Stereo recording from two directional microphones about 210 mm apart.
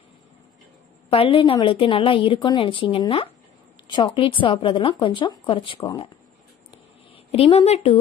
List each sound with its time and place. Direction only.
1.1 s speech: 25° left (ahead or behind)
7.2 s speech: 30° left (ahead or behind)